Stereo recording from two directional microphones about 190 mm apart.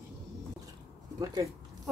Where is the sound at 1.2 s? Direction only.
20° right (ahead or behind).